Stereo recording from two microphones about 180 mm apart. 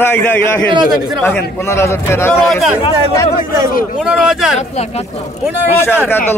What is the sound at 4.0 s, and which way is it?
Speech, 5° right (ahead or behind).